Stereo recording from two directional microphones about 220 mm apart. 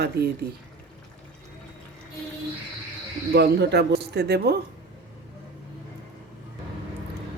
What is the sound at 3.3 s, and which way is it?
Speech, 50° right (ahead or behind).